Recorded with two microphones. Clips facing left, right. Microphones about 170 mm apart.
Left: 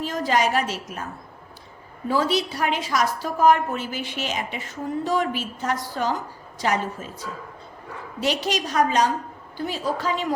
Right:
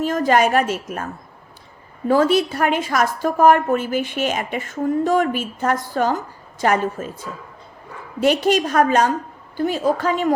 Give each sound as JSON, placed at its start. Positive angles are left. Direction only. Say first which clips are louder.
{"t": 0.0, "sound": "a woman's voice", "louder": "right 6 dB", "side_deg": -50}
{"t": 2.0, "sound": "a woman's voice", "louder": "right 7 dB", "side_deg": -50}